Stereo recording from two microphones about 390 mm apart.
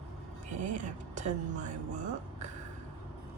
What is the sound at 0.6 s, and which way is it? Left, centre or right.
Speech, centre.